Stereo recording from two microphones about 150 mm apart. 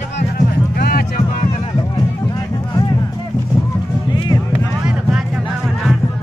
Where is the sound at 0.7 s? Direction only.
90° left.